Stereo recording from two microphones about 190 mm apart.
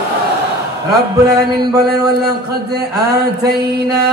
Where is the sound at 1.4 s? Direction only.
55° right (ahead or behind).